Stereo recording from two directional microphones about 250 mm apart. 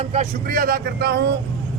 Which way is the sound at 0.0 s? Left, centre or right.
Right.